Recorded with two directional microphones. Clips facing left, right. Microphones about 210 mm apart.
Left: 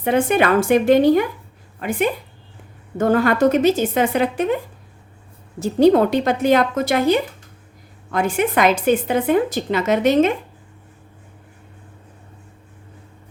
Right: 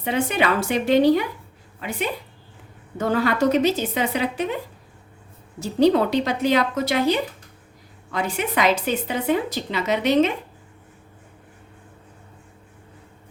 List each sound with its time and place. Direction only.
0.0 s a woman's voice: 50° left (ahead or behind)
5.5 s a woman's voice: 50° left (ahead or behind)